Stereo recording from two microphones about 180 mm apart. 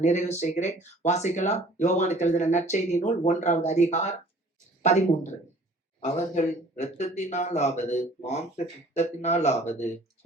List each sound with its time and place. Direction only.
0.0 s speech: 40° left (ahead or behind)